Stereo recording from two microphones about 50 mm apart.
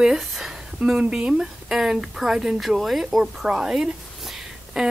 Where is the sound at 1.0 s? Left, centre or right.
Right.